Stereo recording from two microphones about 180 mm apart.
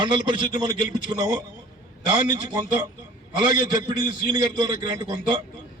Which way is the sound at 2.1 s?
25° right (ahead or behind).